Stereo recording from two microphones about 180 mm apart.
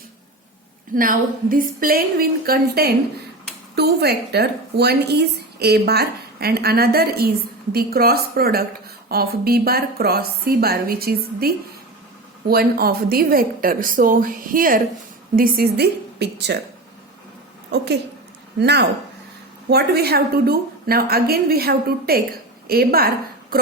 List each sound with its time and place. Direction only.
0.9 s a woman's voice: 50° right (ahead or behind); by 16.6 s 70° right (ahead or behind)
18.6 s a woman's voice: 70° right (ahead or behind)